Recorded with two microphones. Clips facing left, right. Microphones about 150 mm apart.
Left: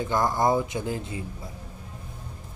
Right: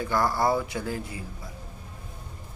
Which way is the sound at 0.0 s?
20° left (ahead or behind).